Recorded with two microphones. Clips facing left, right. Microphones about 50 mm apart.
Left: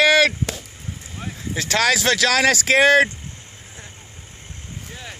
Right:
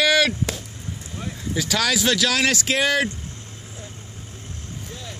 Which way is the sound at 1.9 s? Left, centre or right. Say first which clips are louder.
Left 2 dB; left.